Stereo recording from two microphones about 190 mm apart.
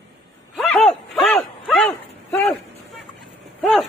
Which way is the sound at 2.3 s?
10° left (ahead or behind).